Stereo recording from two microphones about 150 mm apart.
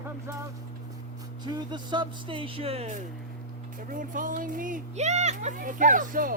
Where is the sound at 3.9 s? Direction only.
65° right (ahead or behind).